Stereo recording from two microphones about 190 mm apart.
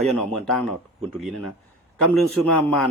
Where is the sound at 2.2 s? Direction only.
Centre (ahead or behind).